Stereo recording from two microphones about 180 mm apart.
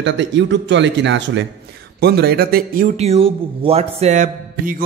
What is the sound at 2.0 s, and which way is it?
A man's voice, 65° right (ahead or behind).